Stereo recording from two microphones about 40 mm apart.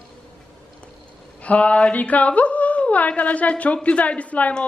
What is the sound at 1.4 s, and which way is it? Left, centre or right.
A woman's voice, left.